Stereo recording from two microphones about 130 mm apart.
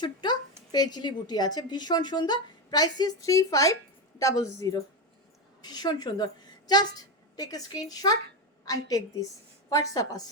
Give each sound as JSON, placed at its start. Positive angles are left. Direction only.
{"t": 0.0, "sound": "a woman's voice", "side_deg": 35}